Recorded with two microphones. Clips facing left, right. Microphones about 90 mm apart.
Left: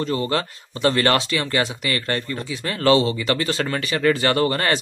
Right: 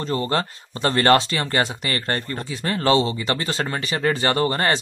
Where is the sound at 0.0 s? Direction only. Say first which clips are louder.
Even; 35° right (ahead or behind).